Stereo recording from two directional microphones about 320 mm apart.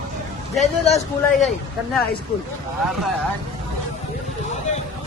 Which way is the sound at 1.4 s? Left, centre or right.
Centre.